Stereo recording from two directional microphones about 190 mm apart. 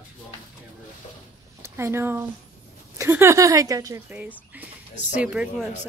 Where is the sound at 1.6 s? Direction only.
15° right (ahead or behind).